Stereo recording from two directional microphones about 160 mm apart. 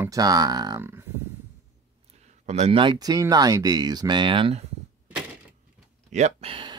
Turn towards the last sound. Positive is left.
turn(degrees=-30)  # may be behind; listen again after turning